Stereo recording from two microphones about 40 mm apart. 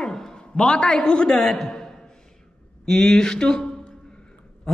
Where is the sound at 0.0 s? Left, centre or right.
Centre.